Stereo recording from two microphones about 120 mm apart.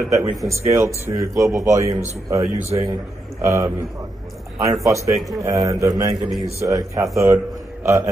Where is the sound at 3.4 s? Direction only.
25° right (ahead or behind).